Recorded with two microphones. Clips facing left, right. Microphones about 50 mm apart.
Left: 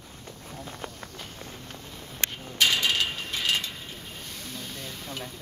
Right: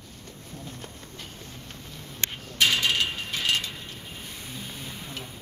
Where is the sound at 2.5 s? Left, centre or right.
Centre.